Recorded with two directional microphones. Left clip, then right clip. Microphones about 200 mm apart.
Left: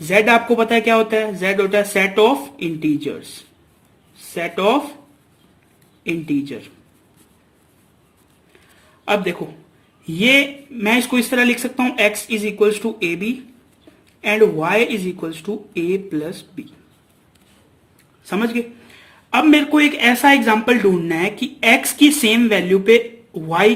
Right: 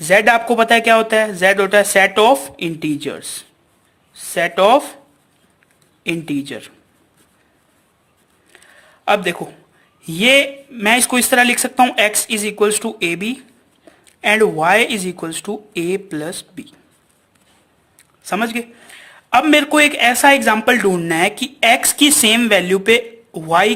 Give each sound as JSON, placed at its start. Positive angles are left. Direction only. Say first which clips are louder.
{"t": 0.1, "sound": "speech", "louder": "right 2 dB", "side_deg": -50}
{"t": 4.4, "sound": "speech", "louder": "right 5 dB", "side_deg": -50}
{"t": 6.0, "sound": "speech", "louder": "even", "side_deg": -50}
{"t": 9.0, "sound": "speech", "louder": "right 3 dB", "side_deg": -45}
{"t": 18.3, "sound": "speech", "louder": "right 2 dB", "side_deg": -35}